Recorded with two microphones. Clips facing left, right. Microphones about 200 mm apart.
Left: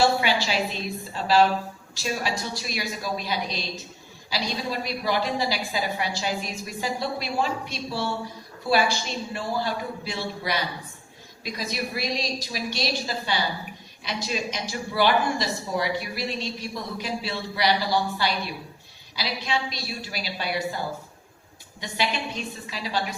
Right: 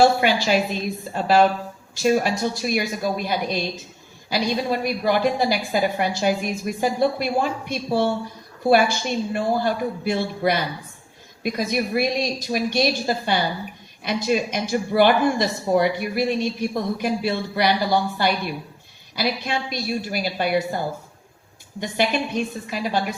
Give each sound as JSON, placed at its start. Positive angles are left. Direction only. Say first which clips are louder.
{"t": 0.0, "sound": "speech", "louder": "right 5 dB", "side_deg": -50}